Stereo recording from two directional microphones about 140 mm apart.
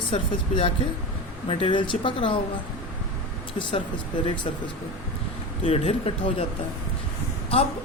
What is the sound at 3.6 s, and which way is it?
Speech, 35° left (ahead or behind).